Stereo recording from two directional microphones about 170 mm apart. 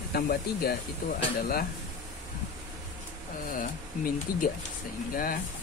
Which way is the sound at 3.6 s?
55° left (ahead or behind).